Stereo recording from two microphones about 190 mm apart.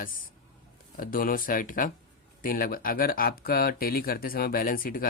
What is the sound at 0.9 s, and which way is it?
Speech, 45° left (ahead or behind).